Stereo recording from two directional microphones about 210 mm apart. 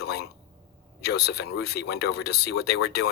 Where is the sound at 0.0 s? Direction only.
50° left (ahead or behind).